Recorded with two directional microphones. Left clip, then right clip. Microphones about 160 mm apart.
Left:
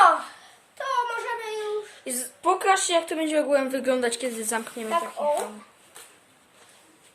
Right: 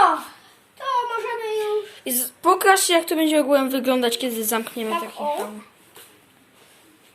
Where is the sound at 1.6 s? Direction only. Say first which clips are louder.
Right 6 dB; centre (ahead or behind).